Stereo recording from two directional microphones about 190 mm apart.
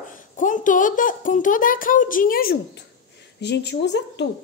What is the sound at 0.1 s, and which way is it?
A woman's voice, 45° left (ahead or behind).